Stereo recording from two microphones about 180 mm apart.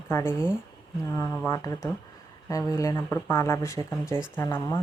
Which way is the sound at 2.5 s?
20° left (ahead or behind).